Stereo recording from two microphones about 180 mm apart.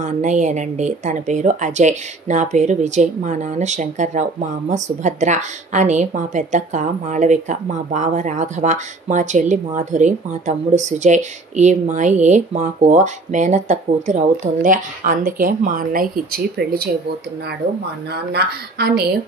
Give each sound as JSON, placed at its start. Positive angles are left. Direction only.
{"t": 0.0, "sound": "a woman's voice", "side_deg": -40}
{"t": 18.1, "sound": "speech", "side_deg": -60}